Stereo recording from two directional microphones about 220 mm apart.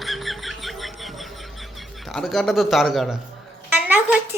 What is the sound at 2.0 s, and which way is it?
A man's voice, centre (ahead or behind).